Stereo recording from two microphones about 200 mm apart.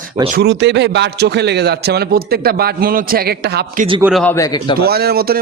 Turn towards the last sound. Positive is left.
turn(degrees=-50)  # may be behind; listen again after turning